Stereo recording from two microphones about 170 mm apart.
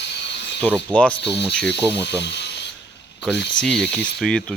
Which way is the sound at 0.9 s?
10° left (ahead or behind).